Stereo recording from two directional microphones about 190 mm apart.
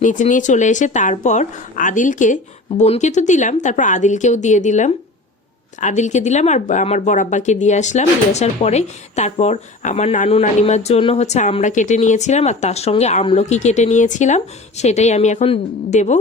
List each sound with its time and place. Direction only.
0.0 s speech: 40° left (ahead or behind)